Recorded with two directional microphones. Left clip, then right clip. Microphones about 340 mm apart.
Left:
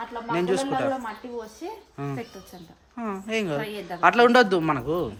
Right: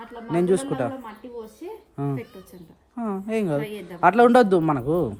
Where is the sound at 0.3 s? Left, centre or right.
Centre.